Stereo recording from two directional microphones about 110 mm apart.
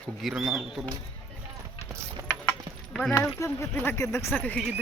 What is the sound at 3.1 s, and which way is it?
Speech, 25° left (ahead or behind).